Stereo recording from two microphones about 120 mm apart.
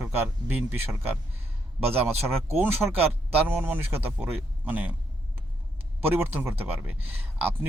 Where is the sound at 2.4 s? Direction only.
20° right (ahead or behind).